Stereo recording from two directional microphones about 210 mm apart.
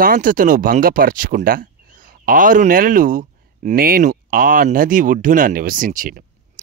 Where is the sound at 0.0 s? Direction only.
40° right (ahead or behind).